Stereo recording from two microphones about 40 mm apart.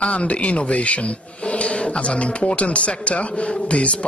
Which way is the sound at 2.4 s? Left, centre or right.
Left.